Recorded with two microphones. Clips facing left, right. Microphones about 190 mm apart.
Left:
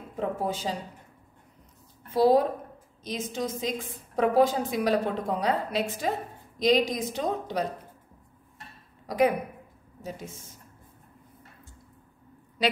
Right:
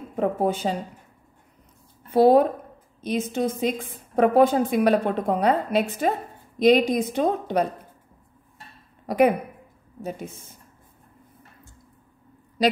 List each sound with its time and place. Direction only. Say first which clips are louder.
0.1 s a woman's voice: right 7 dB; 55° right (ahead or behind)
2.1 s a woman's voice: right 5 dB; 60° right (ahead or behind)
9.0 s a woman's voice: right 4 dB; 60° right (ahead or behind)